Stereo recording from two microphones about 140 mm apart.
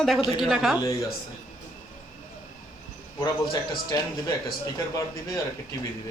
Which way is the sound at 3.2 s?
30° left (ahead or behind).